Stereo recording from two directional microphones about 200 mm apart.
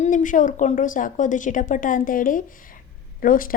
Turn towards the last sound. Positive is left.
turn(degrees=45)  # may be behind; listen again after turning